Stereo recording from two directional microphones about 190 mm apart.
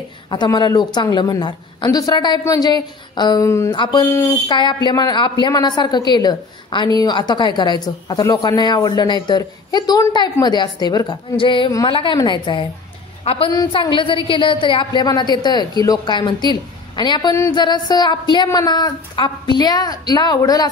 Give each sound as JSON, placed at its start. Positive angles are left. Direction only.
{"t": 0.3, "sound": "a woman's voice", "side_deg": 25}